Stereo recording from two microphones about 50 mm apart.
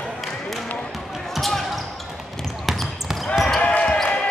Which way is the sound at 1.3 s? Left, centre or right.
Centre.